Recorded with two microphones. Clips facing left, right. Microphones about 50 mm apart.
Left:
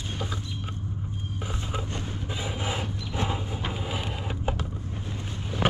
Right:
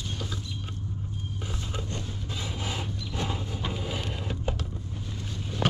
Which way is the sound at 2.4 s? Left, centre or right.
Centre.